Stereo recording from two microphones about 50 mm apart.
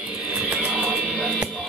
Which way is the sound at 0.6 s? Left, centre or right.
Right.